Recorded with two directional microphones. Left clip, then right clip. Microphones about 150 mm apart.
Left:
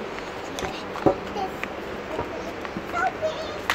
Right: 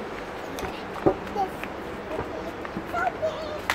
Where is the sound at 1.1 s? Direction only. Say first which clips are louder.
Left 2 dB; 90° left.